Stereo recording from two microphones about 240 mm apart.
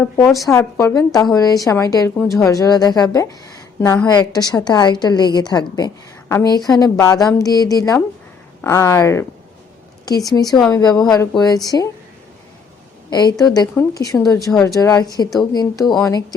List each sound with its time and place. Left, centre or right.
0.0 s a woman's voice: centre
13.1 s a woman's voice: centre
15.8 s speech: centre